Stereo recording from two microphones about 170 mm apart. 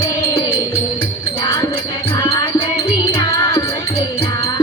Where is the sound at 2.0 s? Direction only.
25° left (ahead or behind).